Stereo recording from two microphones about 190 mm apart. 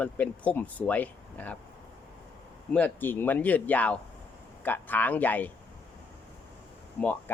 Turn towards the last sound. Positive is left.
turn(degrees=10)  # may be behind; listen again after turning